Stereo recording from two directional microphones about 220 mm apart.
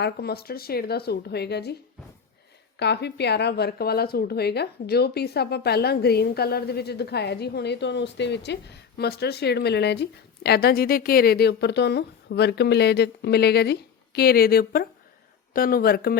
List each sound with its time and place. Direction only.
0.0 s speech: 45° left (ahead or behind)
2.7 s speech: 50° left (ahead or behind)